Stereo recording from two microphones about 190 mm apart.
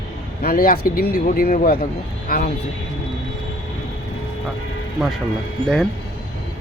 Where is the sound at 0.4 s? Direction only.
50° left (ahead or behind).